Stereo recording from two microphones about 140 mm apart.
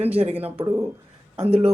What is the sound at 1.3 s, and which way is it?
Speech, 45° right (ahead or behind).